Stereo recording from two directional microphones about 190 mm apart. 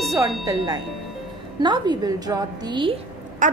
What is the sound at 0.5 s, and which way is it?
A woman's voice, 20° right (ahead or behind).